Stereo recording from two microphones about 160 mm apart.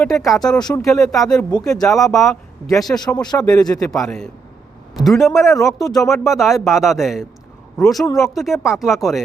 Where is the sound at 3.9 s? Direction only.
Centre (ahead or behind).